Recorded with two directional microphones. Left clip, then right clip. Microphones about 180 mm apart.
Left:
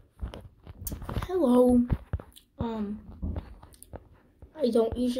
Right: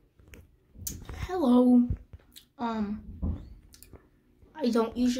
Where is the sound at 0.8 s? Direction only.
5° left (ahead or behind).